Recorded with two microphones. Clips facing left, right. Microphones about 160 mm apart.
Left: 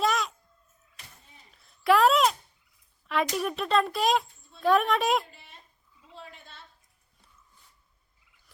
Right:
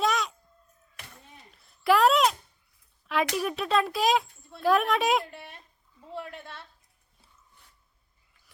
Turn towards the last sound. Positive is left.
turn(degrees=-65)  # may be behind; listen again after turning